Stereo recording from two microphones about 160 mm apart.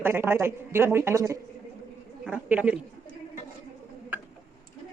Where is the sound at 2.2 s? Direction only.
10° right (ahead or behind).